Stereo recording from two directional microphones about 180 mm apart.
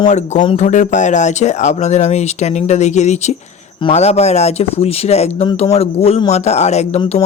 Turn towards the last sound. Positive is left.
turn(degrees=35)  # may be behind; listen again after turning